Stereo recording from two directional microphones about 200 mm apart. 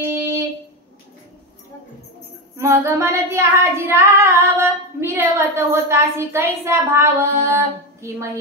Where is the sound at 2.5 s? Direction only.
15° right (ahead or behind).